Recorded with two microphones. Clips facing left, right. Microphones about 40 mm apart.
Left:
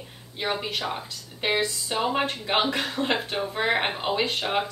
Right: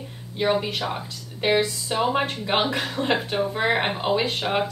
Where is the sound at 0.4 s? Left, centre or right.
Centre.